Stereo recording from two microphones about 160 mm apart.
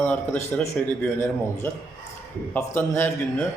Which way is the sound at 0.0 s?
15° left (ahead or behind).